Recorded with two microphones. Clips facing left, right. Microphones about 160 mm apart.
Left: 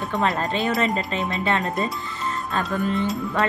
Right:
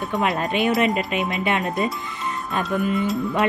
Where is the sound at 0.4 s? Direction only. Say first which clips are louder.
Right 3 dB; 15° right (ahead or behind).